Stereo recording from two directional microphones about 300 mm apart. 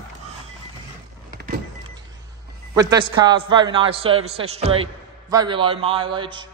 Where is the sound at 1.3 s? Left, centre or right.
Right.